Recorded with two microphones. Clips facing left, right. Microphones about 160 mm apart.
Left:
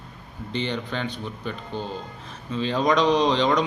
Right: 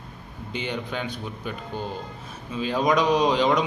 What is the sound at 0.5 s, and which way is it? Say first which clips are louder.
A man's voice: left 2 dB; 10° right (ahead or behind).